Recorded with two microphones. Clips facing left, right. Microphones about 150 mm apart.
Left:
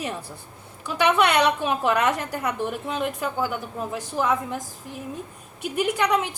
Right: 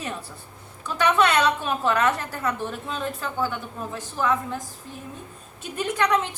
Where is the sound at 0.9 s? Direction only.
10° left (ahead or behind).